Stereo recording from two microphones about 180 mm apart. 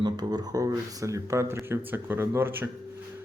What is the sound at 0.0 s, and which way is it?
Speech, 25° right (ahead or behind).